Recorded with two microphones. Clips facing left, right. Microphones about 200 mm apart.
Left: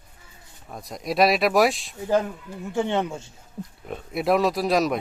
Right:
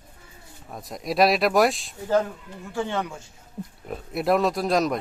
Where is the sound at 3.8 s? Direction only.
Centre (ahead or behind).